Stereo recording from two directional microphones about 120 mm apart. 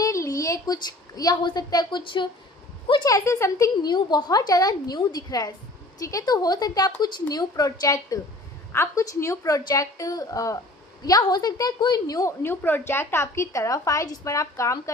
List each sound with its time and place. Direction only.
0.0 s a woman's voice: 25° left (ahead or behind); by 2.3 s 40° left (ahead or behind)
3.0 s a woman's voice: 30° left (ahead or behind)
12.4 s a woman's voice: 15° left (ahead or behind)